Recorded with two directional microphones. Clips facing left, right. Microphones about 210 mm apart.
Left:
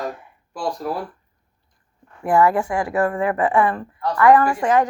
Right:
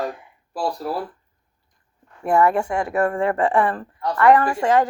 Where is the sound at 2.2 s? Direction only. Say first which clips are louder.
Left 1 dB; 25° right (ahead or behind).